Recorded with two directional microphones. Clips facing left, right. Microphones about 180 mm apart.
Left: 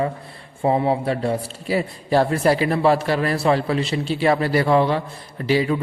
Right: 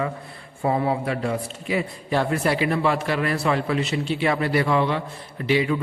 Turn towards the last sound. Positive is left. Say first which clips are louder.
# left 2 dB
turn(degrees=35)  # may be behind; listen again after turning